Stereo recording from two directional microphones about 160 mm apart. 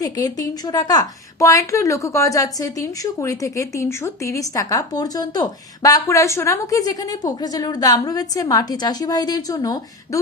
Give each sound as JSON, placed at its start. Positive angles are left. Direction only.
{"t": 0.0, "sound": "a woman's voice", "side_deg": 25}